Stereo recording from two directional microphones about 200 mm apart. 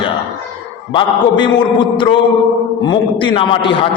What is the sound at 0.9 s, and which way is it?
A man's voice, 25° left (ahead or behind).